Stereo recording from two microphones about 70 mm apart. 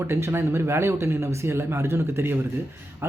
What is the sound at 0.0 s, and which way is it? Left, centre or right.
Speech, right.